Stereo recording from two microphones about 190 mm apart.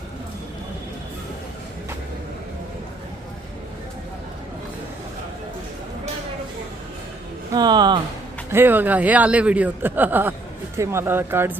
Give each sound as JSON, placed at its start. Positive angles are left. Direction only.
{"t": 7.5, "sound": "speech", "side_deg": -20}
{"t": 8.4, "sound": "speech", "side_deg": -10}